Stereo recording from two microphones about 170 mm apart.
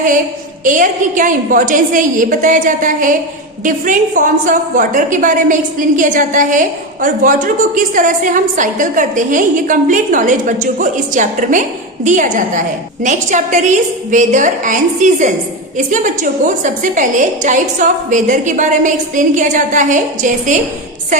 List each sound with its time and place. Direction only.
0.6 s a woman's voice: 50° right (ahead or behind)